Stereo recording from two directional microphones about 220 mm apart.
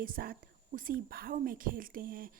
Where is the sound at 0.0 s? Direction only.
40° right (ahead or behind).